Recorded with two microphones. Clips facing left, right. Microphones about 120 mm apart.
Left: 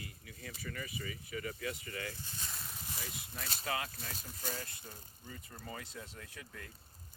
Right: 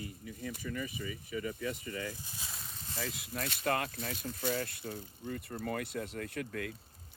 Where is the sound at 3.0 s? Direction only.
90° right.